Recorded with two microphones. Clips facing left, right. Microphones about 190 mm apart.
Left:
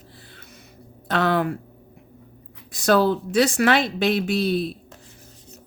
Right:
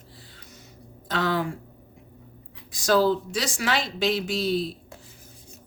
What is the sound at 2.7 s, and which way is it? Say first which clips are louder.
A woman's voice: left 2 dB; 60° left (ahead or behind).